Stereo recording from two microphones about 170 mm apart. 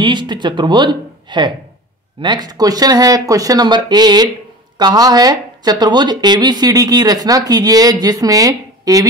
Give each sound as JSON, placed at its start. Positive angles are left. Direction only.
{"t": 0.0, "sound": "speech", "side_deg": -25}